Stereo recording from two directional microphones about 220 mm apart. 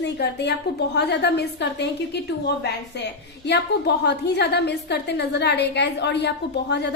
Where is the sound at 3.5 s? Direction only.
50° left (ahead or behind).